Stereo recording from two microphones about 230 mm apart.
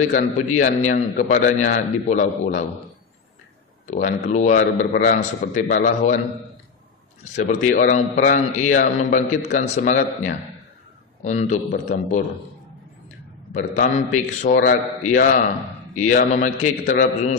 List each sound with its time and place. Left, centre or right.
0.1 s a man's voice: left
3.8 s a man's voice: left
7.3 s a man's voice: left
13.5 s a man's voice: left